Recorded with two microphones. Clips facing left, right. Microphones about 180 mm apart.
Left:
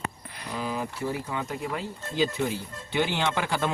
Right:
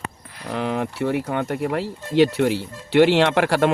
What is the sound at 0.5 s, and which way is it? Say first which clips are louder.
Speech: right 7 dB; 70° right (ahead or behind).